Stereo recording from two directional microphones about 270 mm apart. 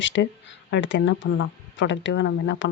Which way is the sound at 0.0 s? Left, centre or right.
Left.